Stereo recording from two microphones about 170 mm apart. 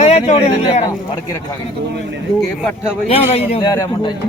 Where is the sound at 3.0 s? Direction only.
40° left (ahead or behind).